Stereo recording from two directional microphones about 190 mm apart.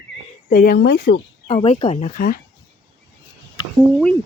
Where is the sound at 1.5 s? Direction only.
30° left (ahead or behind).